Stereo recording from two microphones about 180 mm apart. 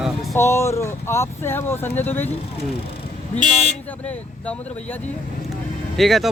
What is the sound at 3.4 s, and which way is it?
Speech, 40° left (ahead or behind).